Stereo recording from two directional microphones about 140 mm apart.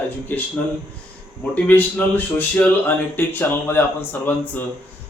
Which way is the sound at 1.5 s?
10° left (ahead or behind).